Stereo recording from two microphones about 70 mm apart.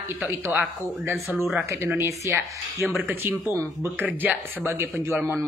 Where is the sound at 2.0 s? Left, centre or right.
Right.